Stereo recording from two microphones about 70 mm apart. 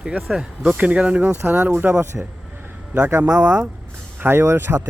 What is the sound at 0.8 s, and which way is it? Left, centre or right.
Speech, centre.